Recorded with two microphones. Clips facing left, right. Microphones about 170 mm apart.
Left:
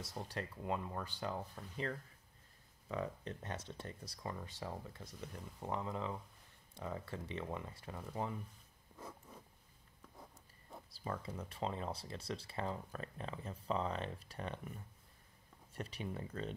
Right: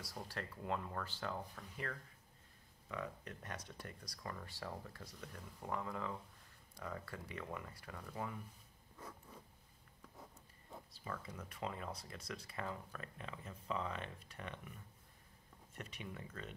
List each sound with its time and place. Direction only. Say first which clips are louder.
0.0 s speech: left 3 dB; 20° left (ahead or behind)
8.9 s zipper: left 2 dB; 10° left (ahead or behind)
10.9 s speech: left 5 dB; 30° left (ahead or behind)
15.7 s speech: left 6 dB; 35° left (ahead or behind)